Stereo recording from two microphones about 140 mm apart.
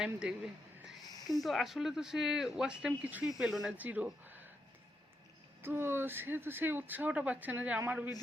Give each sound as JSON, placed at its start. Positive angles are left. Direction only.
{"t": 0.0, "sound": "speech", "side_deg": -5}
{"t": 1.0, "sound": "a sound", "side_deg": 25}
{"t": 1.4, "sound": "speech", "side_deg": 0}
{"t": 5.6, "sound": "speech", "side_deg": -15}